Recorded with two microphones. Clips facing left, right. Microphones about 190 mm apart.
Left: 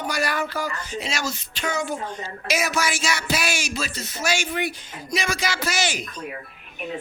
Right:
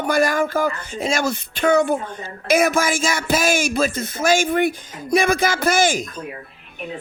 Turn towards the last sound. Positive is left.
turn(degrees=-50)  # may be behind; listen again after turning